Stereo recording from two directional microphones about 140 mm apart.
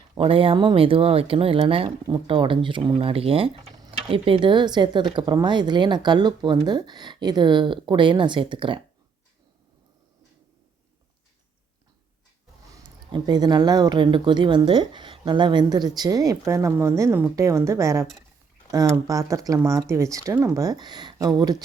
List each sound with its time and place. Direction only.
0.2 s speech: 40° right (ahead or behind)
13.1 s speech: 30° right (ahead or behind)